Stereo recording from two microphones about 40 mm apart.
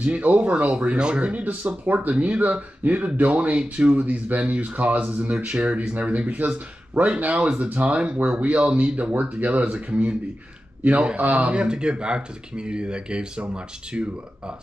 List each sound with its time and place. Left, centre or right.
0.0 s speech: right
0.9 s speech: right
1.2 s speech: right
5.5 s speech: right
5.8 s speech: right
11.5 s speech: right